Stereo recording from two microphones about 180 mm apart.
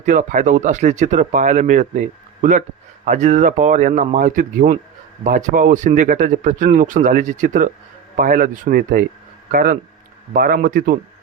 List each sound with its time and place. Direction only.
0.0 s speech: 45° right (ahead or behind)